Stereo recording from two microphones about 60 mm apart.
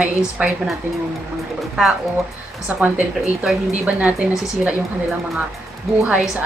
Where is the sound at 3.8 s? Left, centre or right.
Right.